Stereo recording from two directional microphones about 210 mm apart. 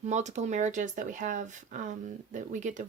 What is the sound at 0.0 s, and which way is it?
Speech, 35° right (ahead or behind).